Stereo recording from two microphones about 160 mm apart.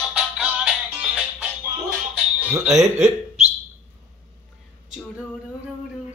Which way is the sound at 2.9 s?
45° right (ahead or behind).